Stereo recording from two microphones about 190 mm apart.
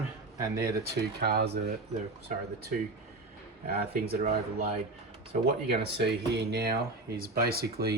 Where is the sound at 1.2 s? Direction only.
55° right (ahead or behind).